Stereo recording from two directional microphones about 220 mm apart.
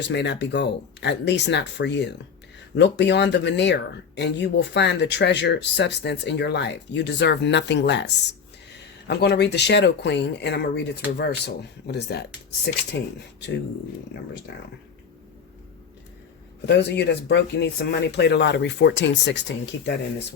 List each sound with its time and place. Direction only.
0.0 s speech: 50° left (ahead or behind)
16.6 s speech: 50° left (ahead or behind)